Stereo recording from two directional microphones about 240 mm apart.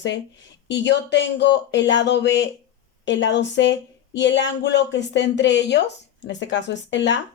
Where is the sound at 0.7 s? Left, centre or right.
Left.